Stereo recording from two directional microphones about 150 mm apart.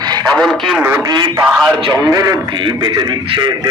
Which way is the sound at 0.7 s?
15° right (ahead or behind).